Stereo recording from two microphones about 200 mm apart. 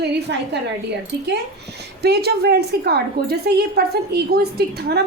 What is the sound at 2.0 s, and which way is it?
A woman's voice, 55° right (ahead or behind).